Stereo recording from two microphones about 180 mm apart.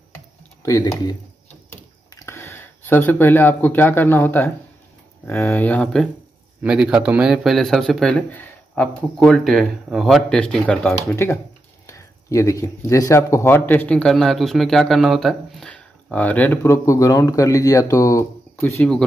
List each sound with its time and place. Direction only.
0.6 s speech: 15° left (ahead or behind)
1.7 s computer keyboard: 15° left (ahead or behind)
5.2 s a man's voice: 15° left (ahead or behind)
6.6 s a man's voice: 5° right (ahead or behind)